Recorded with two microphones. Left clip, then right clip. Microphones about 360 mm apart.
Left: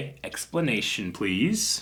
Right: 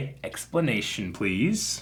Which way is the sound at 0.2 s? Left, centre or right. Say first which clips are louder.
Right 2 dB; right.